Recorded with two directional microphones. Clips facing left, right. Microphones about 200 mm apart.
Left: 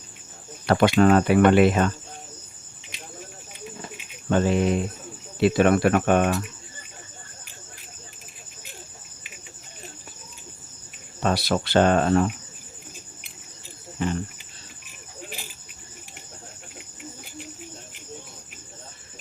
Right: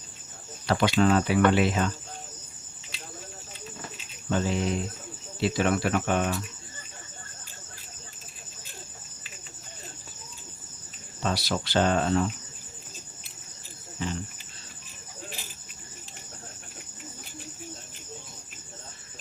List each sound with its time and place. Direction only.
0.7 s speech: 55° left (ahead or behind)
4.3 s speech: 60° left (ahead or behind)
11.2 s speech: 55° left (ahead or behind)
14.0 s cricket: 55° left (ahead or behind)